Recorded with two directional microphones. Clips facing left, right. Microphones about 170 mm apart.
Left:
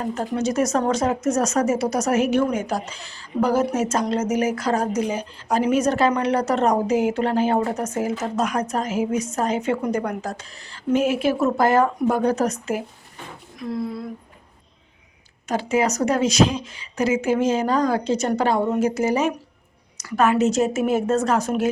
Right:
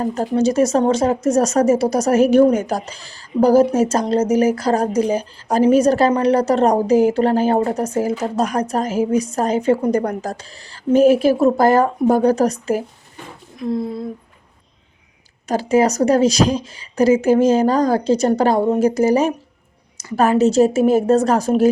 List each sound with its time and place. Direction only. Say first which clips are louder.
0.0 s a woman's voice: right 6 dB; 35° right (ahead or behind)
13.6 s speech: right 5 dB; 25° right (ahead or behind)
15.4 s a woman's voice: right 5 dB; 35° right (ahead or behind)